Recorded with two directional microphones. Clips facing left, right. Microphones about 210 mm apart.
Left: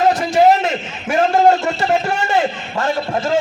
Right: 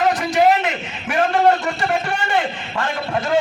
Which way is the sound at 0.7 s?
25° left (ahead or behind).